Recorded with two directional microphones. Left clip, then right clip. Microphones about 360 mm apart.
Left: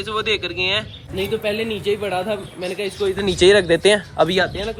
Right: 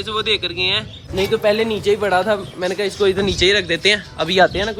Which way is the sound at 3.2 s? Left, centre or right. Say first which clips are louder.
Left 2 dB; centre.